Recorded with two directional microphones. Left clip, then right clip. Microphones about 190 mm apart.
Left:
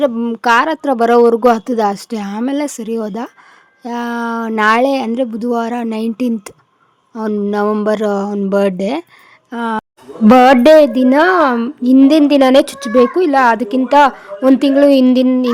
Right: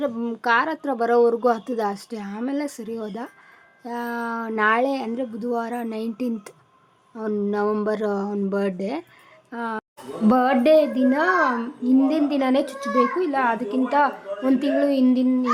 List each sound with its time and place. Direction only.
0.0 s speech: 40° left (ahead or behind)
10.2 s a woman's voice: 65° left (ahead or behind)